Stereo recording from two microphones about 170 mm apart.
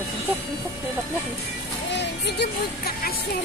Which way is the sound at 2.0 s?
80° left.